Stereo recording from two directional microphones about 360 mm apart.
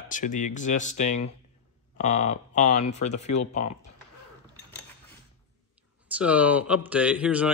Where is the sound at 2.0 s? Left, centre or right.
Centre.